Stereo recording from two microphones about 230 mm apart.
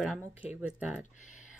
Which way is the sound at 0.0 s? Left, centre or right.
Centre.